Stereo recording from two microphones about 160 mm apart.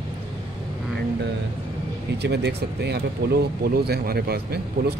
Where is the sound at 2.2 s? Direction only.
90° right.